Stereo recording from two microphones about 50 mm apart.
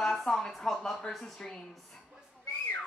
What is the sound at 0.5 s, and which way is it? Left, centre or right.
Speech, centre.